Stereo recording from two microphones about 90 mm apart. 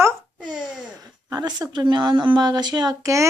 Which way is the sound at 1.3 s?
50° right (ahead or behind).